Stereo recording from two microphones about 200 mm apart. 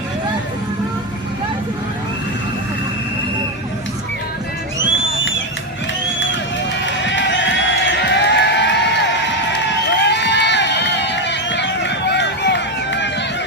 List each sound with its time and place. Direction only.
6.8 s music: 65° left (ahead or behind)